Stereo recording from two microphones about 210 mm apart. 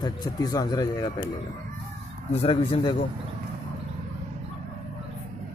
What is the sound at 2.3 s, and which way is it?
Speech, 30° left (ahead or behind).